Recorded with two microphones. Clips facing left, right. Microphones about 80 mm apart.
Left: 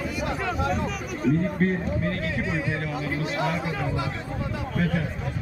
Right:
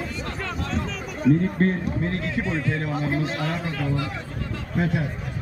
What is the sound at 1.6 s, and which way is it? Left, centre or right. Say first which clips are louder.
Speech: even; right.